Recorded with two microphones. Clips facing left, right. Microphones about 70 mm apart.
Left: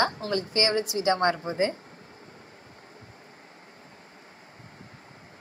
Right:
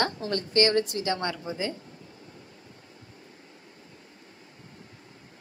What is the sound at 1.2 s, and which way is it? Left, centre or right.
Speech, left.